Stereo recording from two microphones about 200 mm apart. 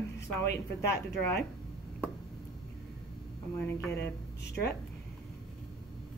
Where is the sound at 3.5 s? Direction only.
10° left (ahead or behind).